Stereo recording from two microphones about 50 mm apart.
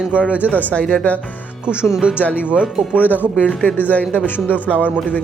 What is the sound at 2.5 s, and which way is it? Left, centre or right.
Speech, right.